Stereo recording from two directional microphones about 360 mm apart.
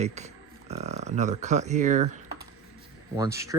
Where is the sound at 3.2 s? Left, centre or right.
Centre.